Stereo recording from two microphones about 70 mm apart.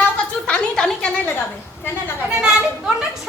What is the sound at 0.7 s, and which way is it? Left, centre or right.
Speech, centre.